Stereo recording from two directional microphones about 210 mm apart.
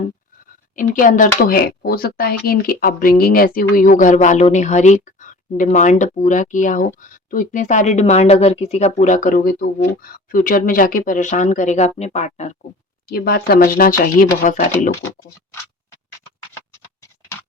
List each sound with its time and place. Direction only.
0.8 s speech: 40° left (ahead or behind)
13.1 s speech: 45° left (ahead or behind)
16.6 s scratch: 15° left (ahead or behind)